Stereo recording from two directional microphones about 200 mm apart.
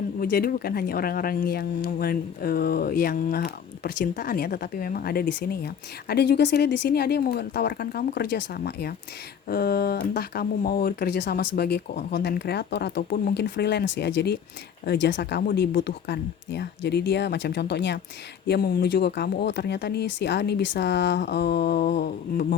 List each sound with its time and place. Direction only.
0.2 s speech: 50° left (ahead or behind)